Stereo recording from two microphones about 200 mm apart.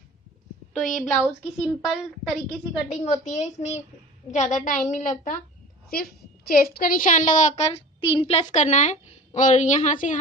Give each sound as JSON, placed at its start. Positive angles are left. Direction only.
{"t": 0.8, "sound": "a woman's voice", "side_deg": 0}
{"t": 2.9, "sound": "a woman's voice", "side_deg": 35}